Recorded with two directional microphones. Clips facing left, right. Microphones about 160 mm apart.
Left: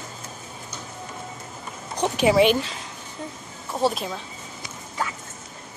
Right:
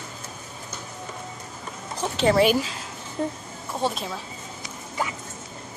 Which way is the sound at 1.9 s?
15° left (ahead or behind).